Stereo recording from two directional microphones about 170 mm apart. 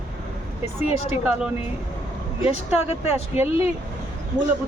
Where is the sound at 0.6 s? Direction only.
40° left (ahead or behind).